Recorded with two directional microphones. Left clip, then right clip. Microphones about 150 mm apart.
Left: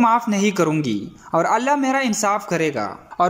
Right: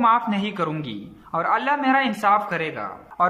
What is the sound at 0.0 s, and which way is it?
Speech, 30° left (ahead or behind).